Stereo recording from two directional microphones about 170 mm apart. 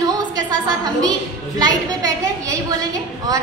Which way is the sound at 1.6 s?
20° right (ahead or behind).